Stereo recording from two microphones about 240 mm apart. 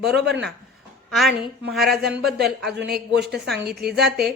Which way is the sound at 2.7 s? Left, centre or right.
Right.